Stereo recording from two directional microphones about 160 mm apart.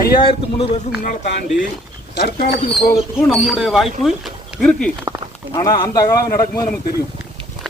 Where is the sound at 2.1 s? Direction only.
80° left.